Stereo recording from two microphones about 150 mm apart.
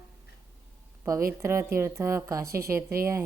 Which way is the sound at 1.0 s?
20° right (ahead or behind).